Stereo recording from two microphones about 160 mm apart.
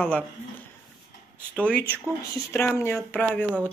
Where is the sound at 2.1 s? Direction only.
25° right (ahead or behind).